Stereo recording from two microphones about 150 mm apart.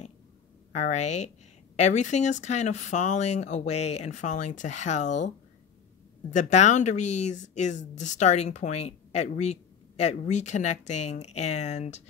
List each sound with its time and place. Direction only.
0.7 s speech: 50° left (ahead or behind)
6.3 s speech: 50° left (ahead or behind)